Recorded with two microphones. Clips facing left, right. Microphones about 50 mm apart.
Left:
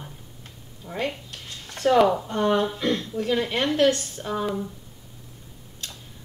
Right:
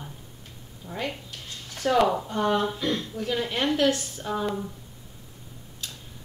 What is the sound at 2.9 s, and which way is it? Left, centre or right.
A woman's voice, left.